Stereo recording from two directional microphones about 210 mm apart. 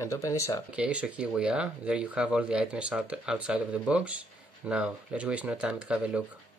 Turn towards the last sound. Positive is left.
turn(degrees=-5)  # may be behind; listen again after turning